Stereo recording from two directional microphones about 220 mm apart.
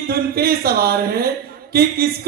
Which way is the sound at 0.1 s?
45° right (ahead or behind).